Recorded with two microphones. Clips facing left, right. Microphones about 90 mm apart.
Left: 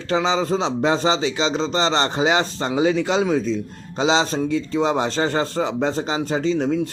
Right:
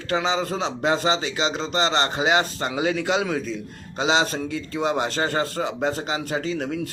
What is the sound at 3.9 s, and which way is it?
A man's voice, 30° left (ahead or behind).